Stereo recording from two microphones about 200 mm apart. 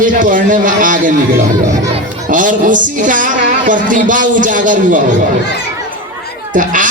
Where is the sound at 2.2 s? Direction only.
40° right (ahead or behind).